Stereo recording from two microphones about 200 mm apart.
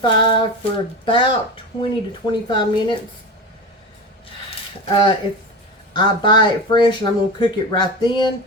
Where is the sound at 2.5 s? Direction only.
25° left (ahead or behind).